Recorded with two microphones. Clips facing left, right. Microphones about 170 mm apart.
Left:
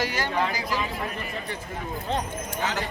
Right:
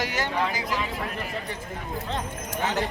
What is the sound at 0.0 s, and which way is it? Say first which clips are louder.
Speech: left 1 dB; 20° right (ahead or behind).